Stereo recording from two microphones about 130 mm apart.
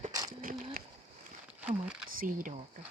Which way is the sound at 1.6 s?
10° right (ahead or behind).